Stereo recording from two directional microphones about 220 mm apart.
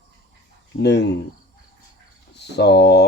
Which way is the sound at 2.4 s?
50° left (ahead or behind).